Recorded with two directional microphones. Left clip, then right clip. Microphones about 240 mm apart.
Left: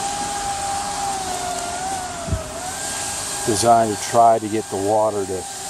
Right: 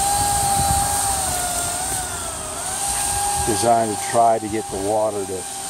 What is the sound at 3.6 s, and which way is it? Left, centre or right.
Speech, centre.